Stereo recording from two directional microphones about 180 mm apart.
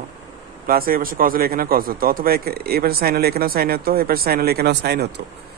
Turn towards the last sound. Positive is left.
turn(degrees=-70)  # may be behind; listen again after turning